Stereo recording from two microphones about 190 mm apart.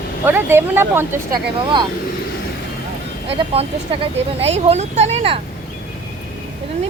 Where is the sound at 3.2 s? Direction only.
30° right (ahead or behind).